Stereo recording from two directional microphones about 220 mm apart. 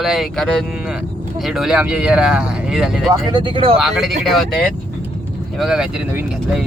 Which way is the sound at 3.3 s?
20° right (ahead or behind).